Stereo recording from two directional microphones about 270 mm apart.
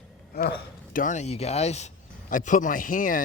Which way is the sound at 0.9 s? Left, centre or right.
Left.